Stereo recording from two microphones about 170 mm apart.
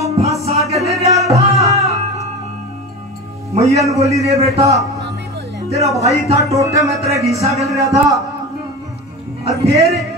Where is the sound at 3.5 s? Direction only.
35° right (ahead or behind).